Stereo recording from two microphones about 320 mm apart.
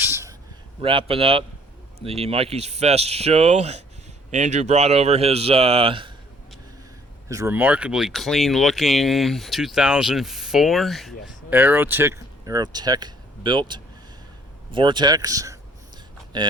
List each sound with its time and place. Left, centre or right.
0.0 s a sound: centre
0.8 s speech: centre
7.3 s speech: centre